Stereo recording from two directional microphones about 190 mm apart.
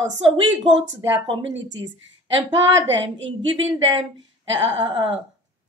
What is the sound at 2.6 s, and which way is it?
Speech, 75° right (ahead or behind).